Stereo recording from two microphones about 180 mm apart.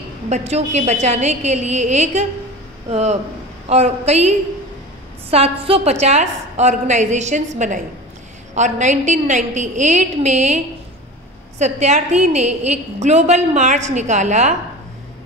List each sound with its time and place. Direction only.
0.3 s a woman's voice: 35° right (ahead or behind)